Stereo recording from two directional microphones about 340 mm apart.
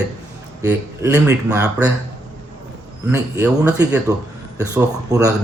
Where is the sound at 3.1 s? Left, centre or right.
Centre.